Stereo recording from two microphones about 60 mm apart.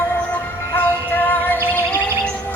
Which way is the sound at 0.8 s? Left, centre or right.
Left.